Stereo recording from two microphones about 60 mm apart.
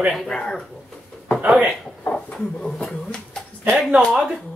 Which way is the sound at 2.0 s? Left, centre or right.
Left.